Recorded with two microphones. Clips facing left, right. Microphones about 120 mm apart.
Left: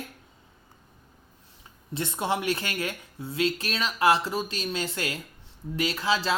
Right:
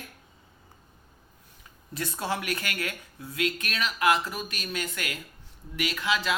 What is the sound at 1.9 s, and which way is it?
Speech, 25° left (ahead or behind).